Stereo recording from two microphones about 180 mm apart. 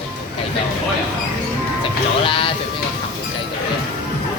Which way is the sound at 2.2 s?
30° left (ahead or behind).